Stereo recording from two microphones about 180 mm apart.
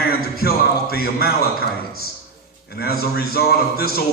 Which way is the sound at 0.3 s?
60° left (ahead or behind).